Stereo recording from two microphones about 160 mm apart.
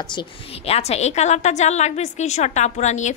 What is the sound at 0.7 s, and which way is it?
A woman's voice, 40° left (ahead or behind).